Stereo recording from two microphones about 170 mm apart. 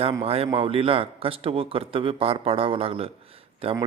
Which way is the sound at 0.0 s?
35° right (ahead or behind).